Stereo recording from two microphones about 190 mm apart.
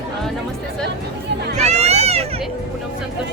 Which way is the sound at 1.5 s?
35° right (ahead or behind).